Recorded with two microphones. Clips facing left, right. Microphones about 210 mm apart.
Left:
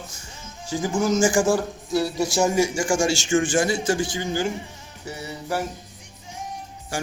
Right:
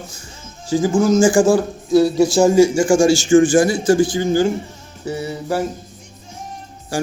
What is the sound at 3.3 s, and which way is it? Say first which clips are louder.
A man's voice: right 8 dB; 40° right (ahead or behind).